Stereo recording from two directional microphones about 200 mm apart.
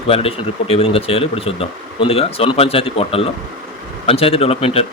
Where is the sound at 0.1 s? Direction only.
30° left (ahead or behind).